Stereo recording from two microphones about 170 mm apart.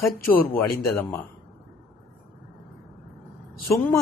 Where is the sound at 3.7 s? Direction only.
10° left (ahead or behind).